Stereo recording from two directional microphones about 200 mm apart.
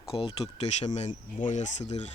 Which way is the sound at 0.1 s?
25° left (ahead or behind).